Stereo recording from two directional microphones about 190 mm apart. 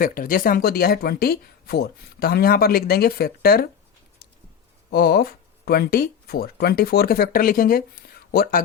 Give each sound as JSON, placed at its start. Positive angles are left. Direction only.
{"t": 0.0, "sound": "speech", "side_deg": 50}
{"t": 4.9, "sound": "speech", "side_deg": 55}